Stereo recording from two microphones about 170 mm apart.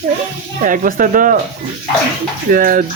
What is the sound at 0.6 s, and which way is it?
Speech, 55° right (ahead or behind).